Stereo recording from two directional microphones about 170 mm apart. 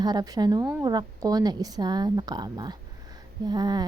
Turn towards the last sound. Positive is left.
turn(degrees=-25)  # may be behind; listen again after turning